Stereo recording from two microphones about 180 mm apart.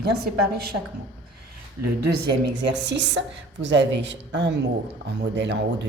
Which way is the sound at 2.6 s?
75° right (ahead or behind).